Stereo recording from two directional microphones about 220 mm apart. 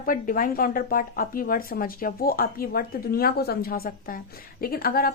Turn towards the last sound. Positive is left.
turn(degrees=45)  # may be behind; listen again after turning